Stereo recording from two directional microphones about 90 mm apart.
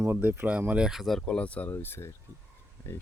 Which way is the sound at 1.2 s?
15° left (ahead or behind).